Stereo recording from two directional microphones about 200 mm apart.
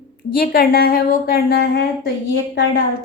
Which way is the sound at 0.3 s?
45° left (ahead or behind).